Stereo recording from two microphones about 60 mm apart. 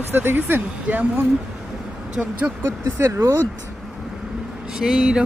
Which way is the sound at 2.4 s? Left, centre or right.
Right.